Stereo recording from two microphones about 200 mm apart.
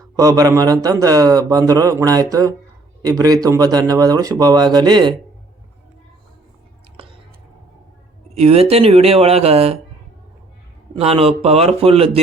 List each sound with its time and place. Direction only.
0.2 s a man's voice: 15° right (ahead or behind)
6.9 s a sound: 25° right (ahead or behind)
8.4 s speech: 30° right (ahead or behind)
10.9 s speech: 30° right (ahead or behind)